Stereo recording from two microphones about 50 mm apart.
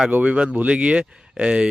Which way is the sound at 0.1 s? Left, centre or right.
Right.